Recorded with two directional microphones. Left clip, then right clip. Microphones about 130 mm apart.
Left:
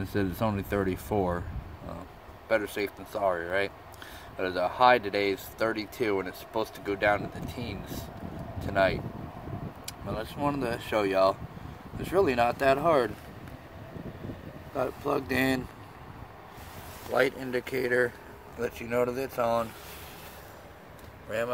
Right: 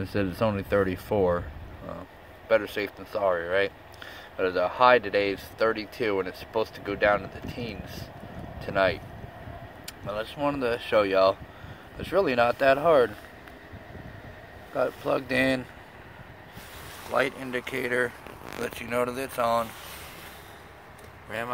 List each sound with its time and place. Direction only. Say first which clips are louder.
0.0 s speech: right 3 dB; 10° left (ahead or behind)
2.4 s speech: right 3 dB; 10° left (ahead or behind)
14.8 s speech: right 3 dB; 10° left (ahead or behind)
17.1 s speech: even; 30° left (ahead or behind)
18.6 s speech: even; 55° left (ahead or behind)